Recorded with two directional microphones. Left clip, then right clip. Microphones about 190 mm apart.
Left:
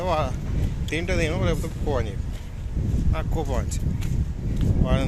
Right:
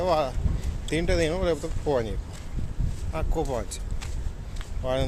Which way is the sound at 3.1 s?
10° right (ahead or behind).